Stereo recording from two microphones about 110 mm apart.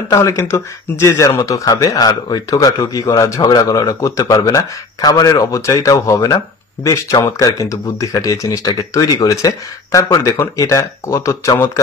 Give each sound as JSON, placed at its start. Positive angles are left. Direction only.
{"t": 0.1, "sound": "speech", "side_deg": 30}